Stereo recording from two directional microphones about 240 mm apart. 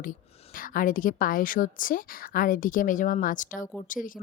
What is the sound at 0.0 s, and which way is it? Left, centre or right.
A woman's voice, left.